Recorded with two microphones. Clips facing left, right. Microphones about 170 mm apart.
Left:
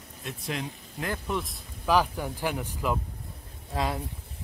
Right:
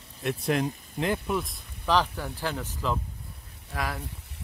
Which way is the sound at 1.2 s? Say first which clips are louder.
Right 2 dB; centre (ahead or behind).